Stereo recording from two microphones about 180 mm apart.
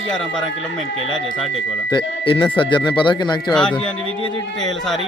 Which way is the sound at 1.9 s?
25° left (ahead or behind).